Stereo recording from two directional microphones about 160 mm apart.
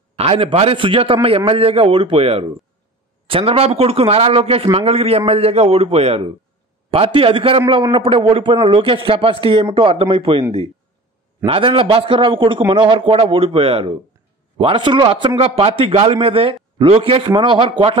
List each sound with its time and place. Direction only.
0.1 s a man's voice: 35° right (ahead or behind)
11.4 s a man's voice: 35° right (ahead or behind)